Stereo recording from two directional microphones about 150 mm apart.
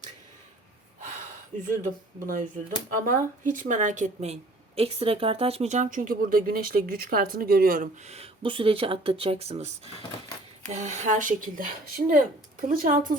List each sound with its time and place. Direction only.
1.6 s a woman's voice: 60° right (ahead or behind); by 7.9 s 75° right (ahead or behind)
8.0 s a woman's voice: 45° right (ahead or behind); by 13.1 s 60° right (ahead or behind)